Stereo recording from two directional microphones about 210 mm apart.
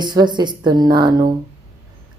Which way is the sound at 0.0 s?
20° right (ahead or behind).